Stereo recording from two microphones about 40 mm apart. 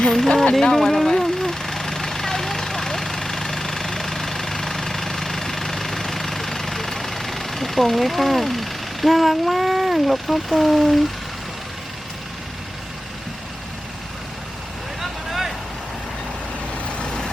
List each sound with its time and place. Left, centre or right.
0.1 s speech: centre
0.7 s vehicle: centre
15.0 s vehicle: centre
17.0 s vehicle: left